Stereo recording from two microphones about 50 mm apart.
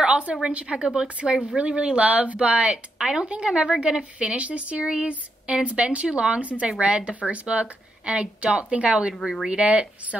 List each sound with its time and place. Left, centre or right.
0.0 s a woman's voice: right
4.2 s a woman's voice: right
9.2 s speech: centre
9.5 s a woman's voice: right